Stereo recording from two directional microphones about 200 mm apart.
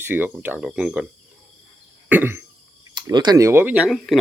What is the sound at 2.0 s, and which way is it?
Cough, 10° right (ahead or behind).